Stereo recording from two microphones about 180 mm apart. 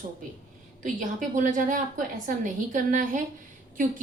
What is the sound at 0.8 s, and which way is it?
A woman's voice, 45° right (ahead or behind).